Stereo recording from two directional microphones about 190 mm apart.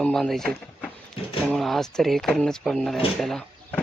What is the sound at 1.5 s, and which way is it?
Speech, centre (ahead or behind).